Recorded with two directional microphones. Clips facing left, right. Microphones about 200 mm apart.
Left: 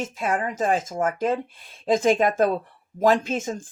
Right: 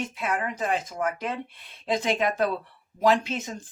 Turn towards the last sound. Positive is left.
turn(degrees=50)  # may be behind; listen again after turning